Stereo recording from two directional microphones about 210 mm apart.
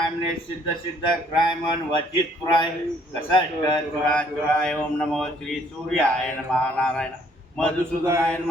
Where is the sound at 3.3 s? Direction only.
20° left (ahead or behind).